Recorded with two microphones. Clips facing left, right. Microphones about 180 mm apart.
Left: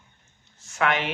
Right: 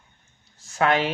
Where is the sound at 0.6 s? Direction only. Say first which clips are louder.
Right 3 dB; 35° right (ahead or behind).